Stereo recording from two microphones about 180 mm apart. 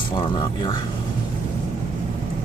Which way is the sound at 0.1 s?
25° left (ahead or behind).